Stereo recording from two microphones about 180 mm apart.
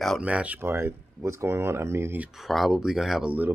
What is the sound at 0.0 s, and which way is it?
Speech, 5° right (ahead or behind).